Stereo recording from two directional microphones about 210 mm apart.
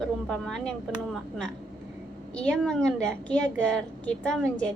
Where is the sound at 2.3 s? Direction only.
5° left (ahead or behind).